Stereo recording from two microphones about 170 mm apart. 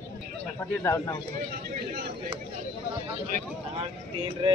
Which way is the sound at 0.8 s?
20° left (ahead or behind).